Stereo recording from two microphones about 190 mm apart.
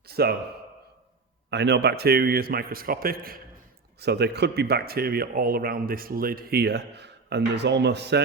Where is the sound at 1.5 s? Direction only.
65° right (ahead or behind).